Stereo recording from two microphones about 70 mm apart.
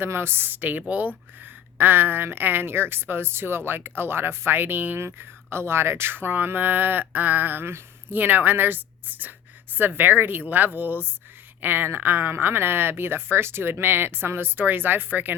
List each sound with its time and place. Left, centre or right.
0.0 s a woman's voice: right